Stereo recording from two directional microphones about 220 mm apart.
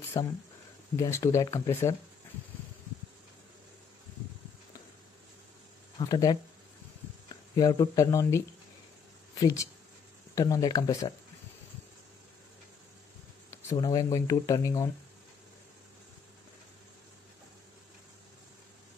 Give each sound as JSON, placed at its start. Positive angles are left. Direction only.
{"t": 0.2, "sound": "speech", "side_deg": 15}
{"t": 5.9, "sound": "speech", "side_deg": 20}
{"t": 13.5, "sound": "speech", "side_deg": 10}